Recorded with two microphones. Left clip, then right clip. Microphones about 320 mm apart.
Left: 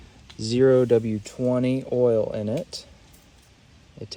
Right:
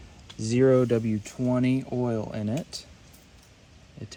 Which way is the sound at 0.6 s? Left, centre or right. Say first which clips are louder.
Left 4 dB; centre.